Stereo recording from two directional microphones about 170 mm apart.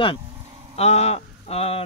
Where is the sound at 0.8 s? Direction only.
40° left (ahead or behind).